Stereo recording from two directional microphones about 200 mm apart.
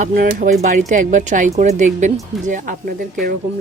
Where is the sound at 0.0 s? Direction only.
45° right (ahead or behind).